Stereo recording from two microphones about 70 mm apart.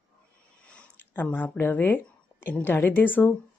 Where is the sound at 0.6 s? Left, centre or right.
Centre.